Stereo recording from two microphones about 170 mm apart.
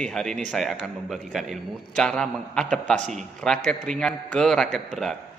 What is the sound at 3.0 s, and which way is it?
Speech, 45° right (ahead or behind).